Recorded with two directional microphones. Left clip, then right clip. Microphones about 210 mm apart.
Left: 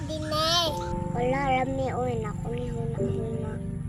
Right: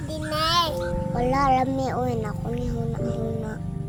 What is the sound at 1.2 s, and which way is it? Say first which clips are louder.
Speech: right 4 dB; 15° right (ahead or behind).